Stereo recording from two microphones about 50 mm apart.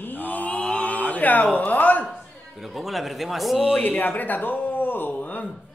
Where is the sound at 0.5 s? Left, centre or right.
Left.